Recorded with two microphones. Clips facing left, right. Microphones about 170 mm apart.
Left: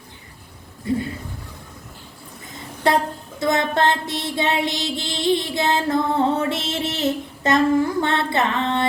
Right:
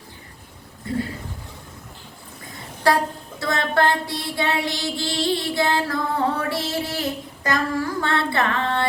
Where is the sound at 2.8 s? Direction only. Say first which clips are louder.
Even; 20° left (ahead or behind).